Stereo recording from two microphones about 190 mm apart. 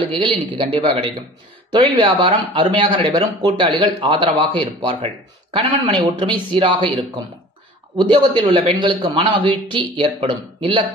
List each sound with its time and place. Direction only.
0.6 s speech: 30° right (ahead or behind)